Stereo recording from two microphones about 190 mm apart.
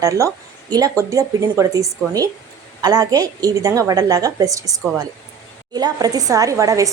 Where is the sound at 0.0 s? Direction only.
15° right (ahead or behind).